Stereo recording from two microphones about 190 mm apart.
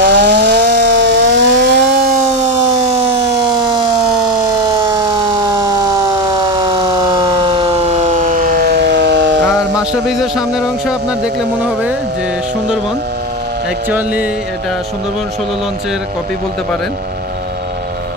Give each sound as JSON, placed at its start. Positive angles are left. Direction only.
{"t": 0.0, "sound": "chainsaw", "side_deg": -60}
{"t": 2.3, "sound": "siren", "side_deg": -35}
{"t": 4.8, "sound": "siren", "side_deg": -20}
{"t": 9.5, "sound": "speech", "side_deg": 0}
{"t": 13.8, "sound": "speech", "side_deg": -10}